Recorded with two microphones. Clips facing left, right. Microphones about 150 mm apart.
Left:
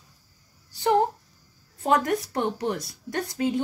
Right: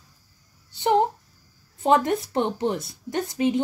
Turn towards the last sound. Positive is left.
turn(degrees=-20)  # may be behind; listen again after turning